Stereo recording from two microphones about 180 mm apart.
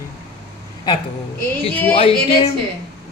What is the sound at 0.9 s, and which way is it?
Music, 25° left (ahead or behind).